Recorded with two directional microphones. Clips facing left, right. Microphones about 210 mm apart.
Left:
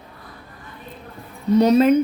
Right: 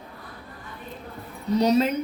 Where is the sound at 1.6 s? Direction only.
55° left (ahead or behind).